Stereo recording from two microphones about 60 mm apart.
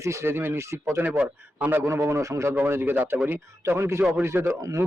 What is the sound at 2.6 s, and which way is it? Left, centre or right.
A man's voice, right.